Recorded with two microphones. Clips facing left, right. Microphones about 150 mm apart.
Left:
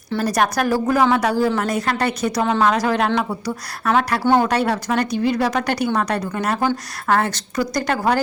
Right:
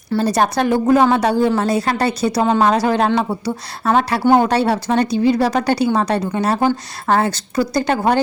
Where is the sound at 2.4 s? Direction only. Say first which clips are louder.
Right 3 dB; 20° right (ahead or behind).